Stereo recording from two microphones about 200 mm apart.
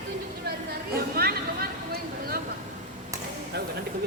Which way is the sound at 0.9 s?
50° right (ahead or behind).